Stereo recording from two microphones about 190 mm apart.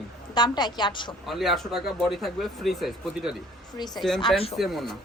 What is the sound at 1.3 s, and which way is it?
Speech, centre (ahead or behind).